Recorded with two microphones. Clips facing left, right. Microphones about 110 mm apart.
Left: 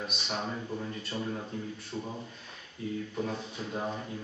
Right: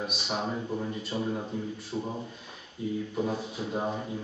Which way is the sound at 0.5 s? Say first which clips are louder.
Right 4 dB; 15° right (ahead or behind).